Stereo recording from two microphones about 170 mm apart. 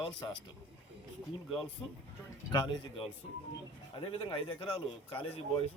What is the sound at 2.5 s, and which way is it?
Speech, 25° left (ahead or behind).